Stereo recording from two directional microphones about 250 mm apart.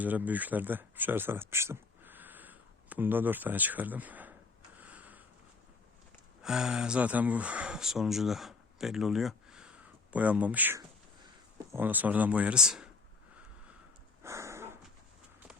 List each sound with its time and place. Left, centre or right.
0.0 s speech: centre
4.8 s a sound: centre
6.4 s speech: centre
14.2 s dog: centre